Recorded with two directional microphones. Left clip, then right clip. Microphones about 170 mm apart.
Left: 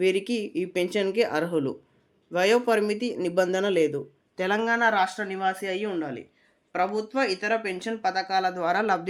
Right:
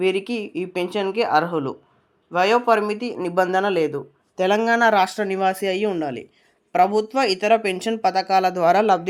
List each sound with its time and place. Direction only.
0.0 s speech: centre (ahead or behind)
4.4 s speech: 25° right (ahead or behind)
4.6 s speech: 55° right (ahead or behind)